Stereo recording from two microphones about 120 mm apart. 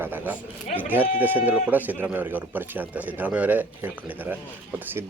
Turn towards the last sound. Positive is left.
turn(degrees=-15)  # may be behind; listen again after turning